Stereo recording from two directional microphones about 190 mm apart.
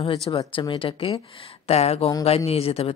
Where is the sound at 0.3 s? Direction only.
25° left (ahead or behind).